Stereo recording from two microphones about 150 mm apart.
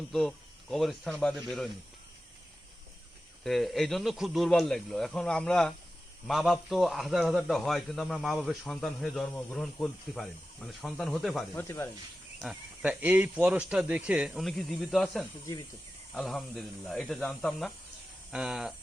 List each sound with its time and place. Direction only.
0.1 s a man's voice: centre (ahead or behind)
3.4 s a man's voice: centre (ahead or behind)
11.5 s speech: 15° left (ahead or behind)
12.4 s a man's voice: 5° right (ahead or behind)